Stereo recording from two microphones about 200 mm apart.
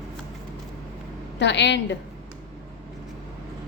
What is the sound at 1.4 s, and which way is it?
Speech, 60° left (ahead or behind).